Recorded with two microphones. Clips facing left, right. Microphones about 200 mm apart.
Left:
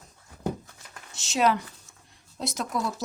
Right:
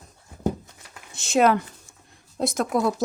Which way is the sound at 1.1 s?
55° right (ahead or behind).